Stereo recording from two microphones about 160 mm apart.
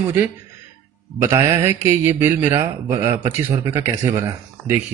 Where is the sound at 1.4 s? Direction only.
15° right (ahead or behind).